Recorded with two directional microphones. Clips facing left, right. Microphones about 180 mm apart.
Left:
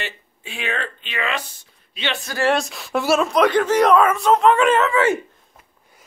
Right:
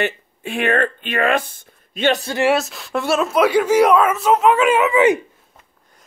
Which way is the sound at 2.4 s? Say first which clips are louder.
Right 1 dB; 5° right (ahead or behind).